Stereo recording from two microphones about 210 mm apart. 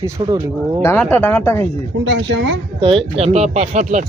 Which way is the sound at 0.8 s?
10° left (ahead or behind).